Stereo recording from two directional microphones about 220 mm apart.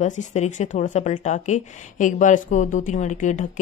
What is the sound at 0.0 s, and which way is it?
Speech, 35° left (ahead or behind).